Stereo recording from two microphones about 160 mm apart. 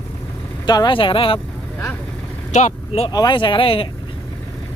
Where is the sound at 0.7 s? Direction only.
30° left (ahead or behind).